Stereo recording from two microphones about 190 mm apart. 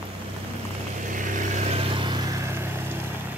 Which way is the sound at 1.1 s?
40° right (ahead or behind).